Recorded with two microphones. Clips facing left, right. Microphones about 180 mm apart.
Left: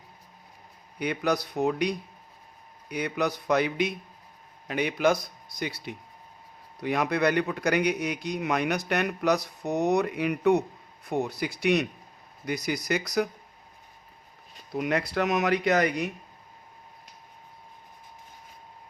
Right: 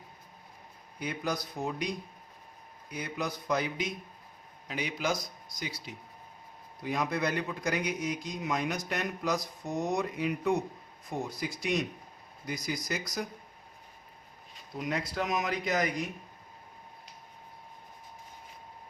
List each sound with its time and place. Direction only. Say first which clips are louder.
0.9 s a man's voice: left 7 dB; 70° left (ahead or behind)
14.8 s a man's voice: left 6 dB; 70° left (ahead or behind)